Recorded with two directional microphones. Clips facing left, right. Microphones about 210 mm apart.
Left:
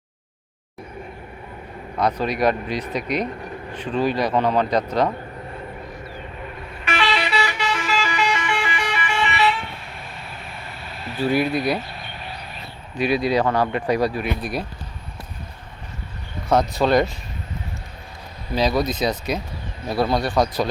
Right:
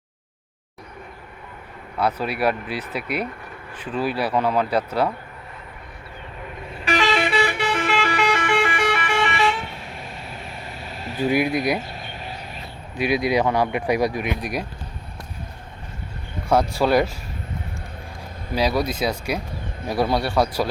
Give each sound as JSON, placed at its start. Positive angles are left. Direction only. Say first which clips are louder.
{"t": 2.0, "sound": "speech", "louder": "left 2 dB", "side_deg": -5}
{"t": 6.8, "sound": "vehicle", "louder": "right 3 dB", "side_deg": -40}
{"t": 11.2, "sound": "speech", "louder": "even", "side_deg": -15}
{"t": 13.0, "sound": "speech", "louder": "left 1 dB", "side_deg": -15}
{"t": 16.5, "sound": "speech", "louder": "even", "side_deg": -10}
{"t": 18.5, "sound": "speech", "louder": "left 1 dB", "side_deg": -10}